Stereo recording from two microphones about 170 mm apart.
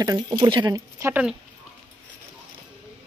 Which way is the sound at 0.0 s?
25° right (ahead or behind).